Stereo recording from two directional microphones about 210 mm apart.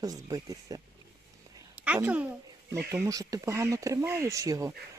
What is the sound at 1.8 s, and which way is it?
A child's voice, 5° right (ahead or behind).